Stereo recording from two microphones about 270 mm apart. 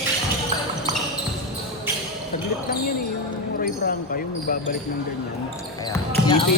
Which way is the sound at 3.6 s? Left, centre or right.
Left.